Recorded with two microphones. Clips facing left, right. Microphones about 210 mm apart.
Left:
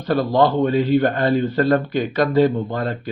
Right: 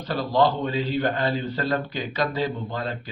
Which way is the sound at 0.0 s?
55° left (ahead or behind).